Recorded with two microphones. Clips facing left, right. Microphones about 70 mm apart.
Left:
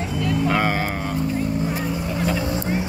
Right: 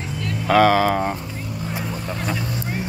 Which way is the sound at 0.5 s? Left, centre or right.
Right.